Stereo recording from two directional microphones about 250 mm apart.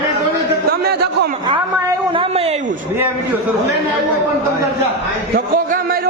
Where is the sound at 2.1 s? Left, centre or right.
Right.